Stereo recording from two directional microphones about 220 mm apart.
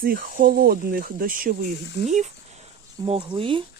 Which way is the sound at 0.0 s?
40° right (ahead or behind).